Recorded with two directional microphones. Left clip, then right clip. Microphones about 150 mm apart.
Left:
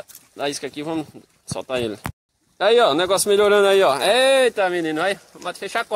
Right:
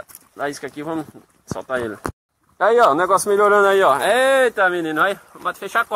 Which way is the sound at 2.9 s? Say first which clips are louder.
Right 2 dB; 55° left (ahead or behind).